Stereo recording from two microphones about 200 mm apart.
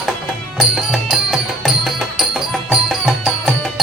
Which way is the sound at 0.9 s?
Centre (ahead or behind).